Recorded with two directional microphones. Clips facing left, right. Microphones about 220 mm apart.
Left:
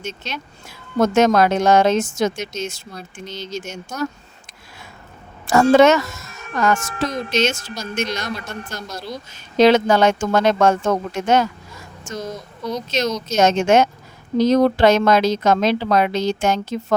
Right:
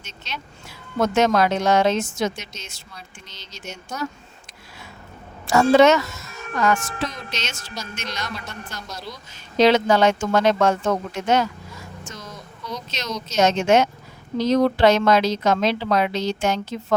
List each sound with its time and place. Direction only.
0.0 s speech: 50° left (ahead or behind)
5.5 s speech: 50° left (ahead or behind)
12.9 s speech: 45° left (ahead or behind)